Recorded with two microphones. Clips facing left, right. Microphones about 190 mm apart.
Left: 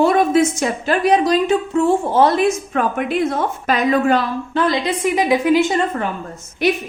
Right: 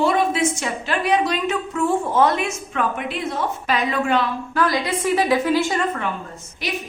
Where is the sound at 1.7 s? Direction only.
25° left (ahead or behind).